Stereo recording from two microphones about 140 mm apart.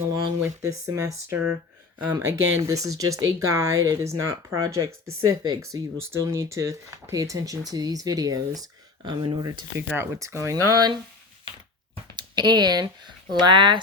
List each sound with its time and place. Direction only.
0.1 s speech: 25° right (ahead or behind)
9.9 s speech: 20° right (ahead or behind)
12.1 s speech: 30° right (ahead or behind)